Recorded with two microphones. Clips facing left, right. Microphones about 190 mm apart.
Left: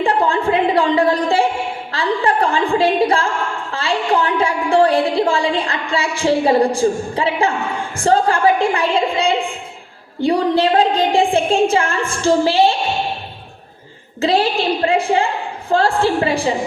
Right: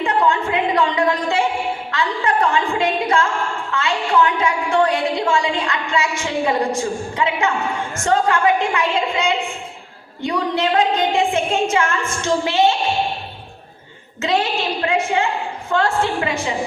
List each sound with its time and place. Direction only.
0.0 s a sound: 30° left (ahead or behind)
1.9 s a woman's voice: 30° left (ahead or behind)
14.2 s a woman's voice: 30° left (ahead or behind)